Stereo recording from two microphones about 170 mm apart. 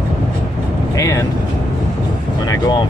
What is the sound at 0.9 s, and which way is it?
Speech, 20° left (ahead or behind).